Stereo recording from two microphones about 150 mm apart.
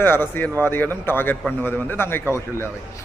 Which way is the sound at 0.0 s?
15° left (ahead or behind).